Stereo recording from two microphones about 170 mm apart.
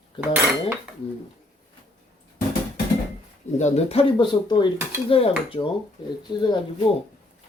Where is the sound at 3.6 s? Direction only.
40° left (ahead or behind); by 6.6 s 25° left (ahead or behind).